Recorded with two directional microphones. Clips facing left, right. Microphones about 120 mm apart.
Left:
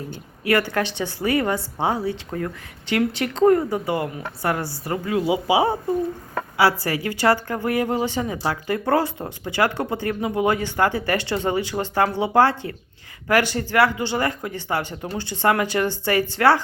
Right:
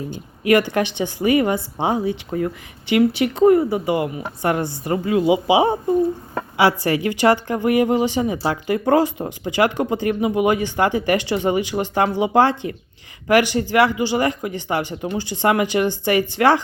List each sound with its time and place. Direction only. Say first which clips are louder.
0.1 s a woman's voice: right 5 dB; 15° right (ahead or behind)